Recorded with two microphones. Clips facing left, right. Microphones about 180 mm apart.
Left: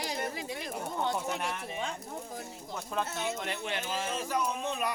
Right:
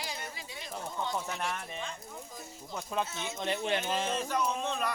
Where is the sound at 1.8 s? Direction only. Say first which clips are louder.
Left 4 dB; 70° left (ahead or behind).